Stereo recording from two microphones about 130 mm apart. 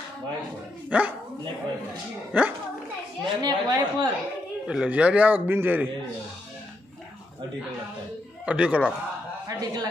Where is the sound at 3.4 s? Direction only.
35° right (ahead or behind).